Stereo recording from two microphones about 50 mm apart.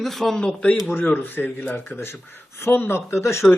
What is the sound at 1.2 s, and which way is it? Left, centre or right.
A man's voice, left.